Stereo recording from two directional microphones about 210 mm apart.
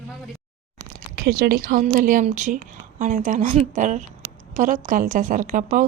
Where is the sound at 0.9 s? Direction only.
45° right (ahead or behind).